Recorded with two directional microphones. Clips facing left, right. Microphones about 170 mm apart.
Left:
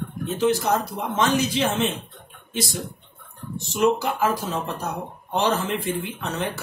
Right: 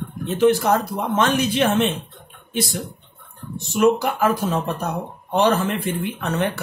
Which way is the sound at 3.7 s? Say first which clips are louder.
Right 3 dB; 55° right (ahead or behind).